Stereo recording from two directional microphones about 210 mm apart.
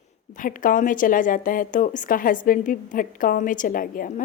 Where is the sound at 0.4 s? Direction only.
40° left (ahead or behind).